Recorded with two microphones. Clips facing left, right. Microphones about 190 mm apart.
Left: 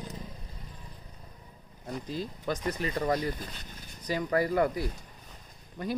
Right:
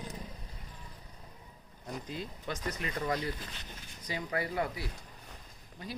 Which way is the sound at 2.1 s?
35° left (ahead or behind).